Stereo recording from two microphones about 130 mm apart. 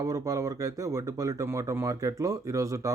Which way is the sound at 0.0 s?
25° right (ahead or behind).